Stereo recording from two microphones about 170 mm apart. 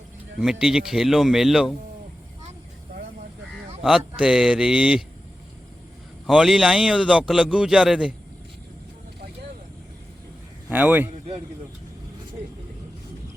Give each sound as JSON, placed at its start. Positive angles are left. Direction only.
{"t": 0.3, "sound": "a man's voice", "side_deg": 0}
{"t": 3.8, "sound": "a man's voice", "side_deg": -5}
{"t": 6.2, "sound": "a man's voice", "side_deg": 0}
{"t": 10.7, "sound": "a man's voice", "side_deg": -10}